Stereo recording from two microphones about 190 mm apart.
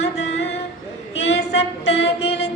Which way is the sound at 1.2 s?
35° left (ahead or behind).